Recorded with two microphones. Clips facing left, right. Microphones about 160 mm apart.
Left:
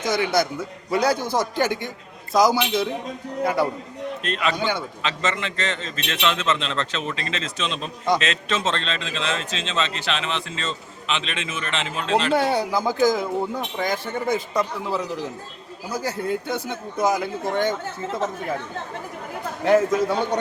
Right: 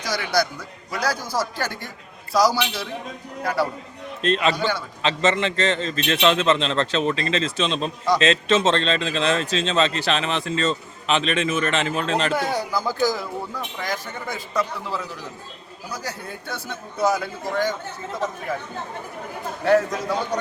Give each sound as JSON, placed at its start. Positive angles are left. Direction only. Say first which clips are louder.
{"t": 0.0, "sound": "a man's voice", "louder": "left 2 dB", "side_deg": 25}
{"t": 4.2, "sound": "a man's voice", "louder": "right 5 dB", "side_deg": -30}
{"t": 12.3, "sound": "a man's voice", "louder": "left 3 dB", "side_deg": 30}
{"t": 19.6, "sound": "a man's voice", "louder": "left 1 dB", "side_deg": 25}